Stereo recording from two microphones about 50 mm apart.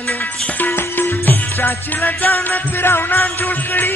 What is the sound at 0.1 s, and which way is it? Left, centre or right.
Music, left.